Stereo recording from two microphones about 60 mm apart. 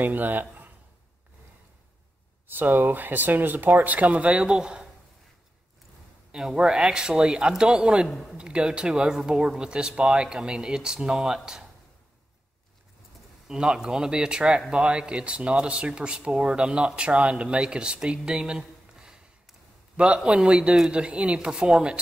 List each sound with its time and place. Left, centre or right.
0.0 s a man's voice: right
2.4 s speech: right; by 4.8 s centre
6.3 s speech: centre
8.1 s speech: centre
8.4 s speech: centre
13.5 s speech: centre